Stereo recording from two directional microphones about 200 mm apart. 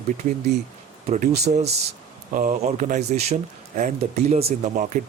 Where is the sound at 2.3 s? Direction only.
35° right (ahead or behind).